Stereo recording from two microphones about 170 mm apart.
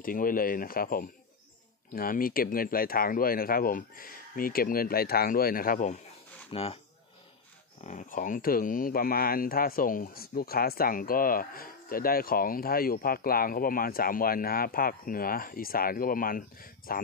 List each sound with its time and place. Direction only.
0.0 s speech: 55° left (ahead or behind)
6.5 s speech: 35° left (ahead or behind)
7.8 s speech: 45° left (ahead or behind)